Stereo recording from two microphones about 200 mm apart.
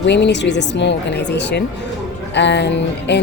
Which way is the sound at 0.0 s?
60° left (ahead or behind).